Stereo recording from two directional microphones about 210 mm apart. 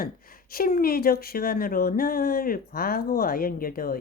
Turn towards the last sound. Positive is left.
turn(degrees=45)  # may be behind; listen again after turning